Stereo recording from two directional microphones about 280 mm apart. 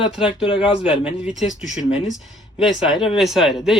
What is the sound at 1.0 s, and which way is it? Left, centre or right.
Speech, centre.